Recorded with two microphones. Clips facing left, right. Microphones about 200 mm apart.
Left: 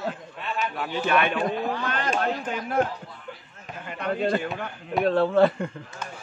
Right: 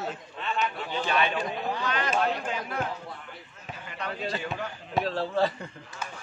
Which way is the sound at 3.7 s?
55° left (ahead or behind).